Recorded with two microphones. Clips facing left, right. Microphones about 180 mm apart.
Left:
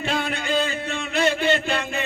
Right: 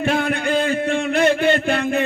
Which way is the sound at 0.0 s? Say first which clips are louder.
Right 6 dB; 50° right (ahead or behind).